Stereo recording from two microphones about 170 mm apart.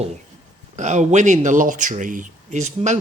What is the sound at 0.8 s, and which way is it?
Speech, 45° right (ahead or behind).